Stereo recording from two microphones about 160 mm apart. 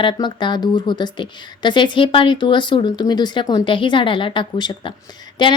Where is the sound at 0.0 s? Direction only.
30° left (ahead or behind).